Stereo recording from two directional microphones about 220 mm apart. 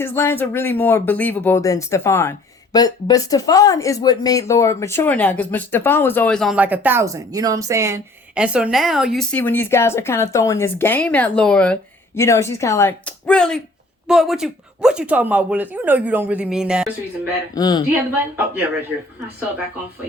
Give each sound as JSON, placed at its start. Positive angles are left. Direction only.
{"t": 0.0, "sound": "speech", "side_deg": 10}
{"t": 17.5, "sound": "speech", "side_deg": 20}
{"t": 17.8, "sound": "speech", "side_deg": -10}